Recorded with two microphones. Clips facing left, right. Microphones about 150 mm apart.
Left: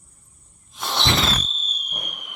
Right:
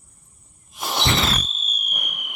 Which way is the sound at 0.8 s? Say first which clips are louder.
Right 1 dB; centre (ahead or behind).